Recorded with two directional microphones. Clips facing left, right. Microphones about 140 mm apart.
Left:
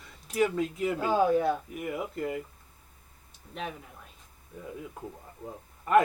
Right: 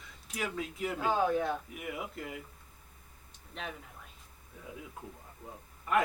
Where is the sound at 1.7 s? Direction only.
45° left (ahead or behind).